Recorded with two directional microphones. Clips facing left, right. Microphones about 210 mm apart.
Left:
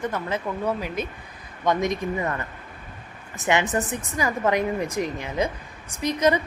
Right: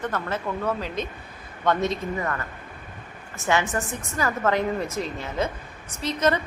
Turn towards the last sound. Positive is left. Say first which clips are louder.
# left 2 dB
turn(degrees=15)  # may be behind; listen again after turning